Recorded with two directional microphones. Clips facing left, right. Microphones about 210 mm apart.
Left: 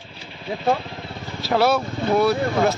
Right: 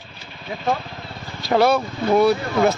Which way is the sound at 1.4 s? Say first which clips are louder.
Right 2 dB; 5° left (ahead or behind).